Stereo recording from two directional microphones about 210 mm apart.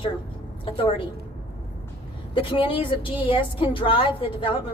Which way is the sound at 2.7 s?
25° left (ahead or behind).